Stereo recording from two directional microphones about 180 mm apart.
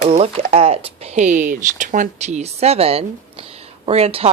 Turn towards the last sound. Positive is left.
turn(degrees=-35)  # may be behind; listen again after turning